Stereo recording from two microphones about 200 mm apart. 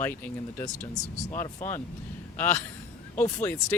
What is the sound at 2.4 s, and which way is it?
Speech, 10° left (ahead or behind).